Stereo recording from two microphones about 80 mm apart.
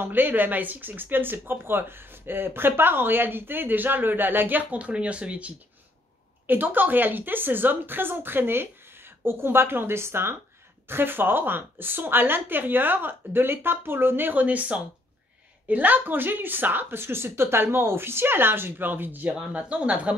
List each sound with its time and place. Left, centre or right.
0.0 s speech: right